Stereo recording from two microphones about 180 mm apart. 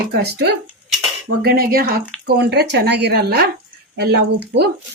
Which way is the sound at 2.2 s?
70° right (ahead or behind).